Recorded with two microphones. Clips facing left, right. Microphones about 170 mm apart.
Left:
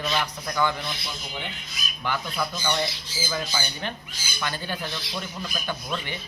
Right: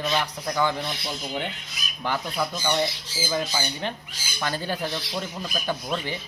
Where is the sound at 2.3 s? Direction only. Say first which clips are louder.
Right 3 dB; 20° right (ahead or behind).